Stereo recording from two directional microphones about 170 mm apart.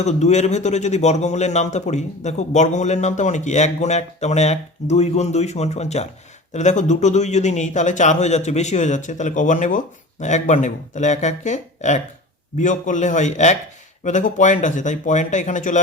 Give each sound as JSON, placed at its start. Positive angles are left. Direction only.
{"t": 0.0, "sound": "speech", "side_deg": 40}